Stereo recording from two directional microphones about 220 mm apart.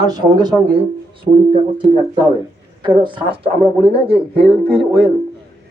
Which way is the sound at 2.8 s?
20° right (ahead or behind).